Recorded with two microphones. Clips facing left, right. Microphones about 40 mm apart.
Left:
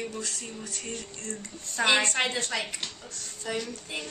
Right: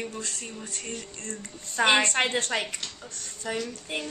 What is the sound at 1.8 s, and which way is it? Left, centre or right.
A woman's voice, right.